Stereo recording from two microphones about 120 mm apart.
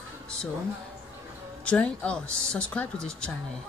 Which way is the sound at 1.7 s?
10° left (ahead or behind).